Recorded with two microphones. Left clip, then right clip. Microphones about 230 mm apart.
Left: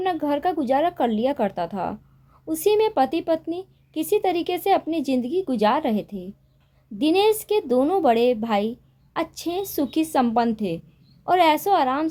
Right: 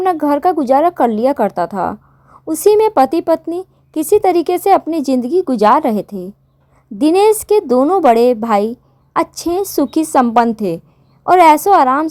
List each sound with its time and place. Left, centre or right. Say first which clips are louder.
0.0 s speech: right 10 dB; right